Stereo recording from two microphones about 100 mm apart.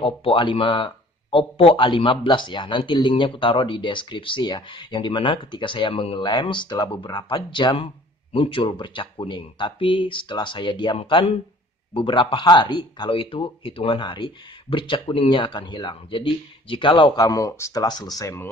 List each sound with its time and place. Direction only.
0.0 s speech: 55° left (ahead or behind); by 18.4 s 35° left (ahead or behind)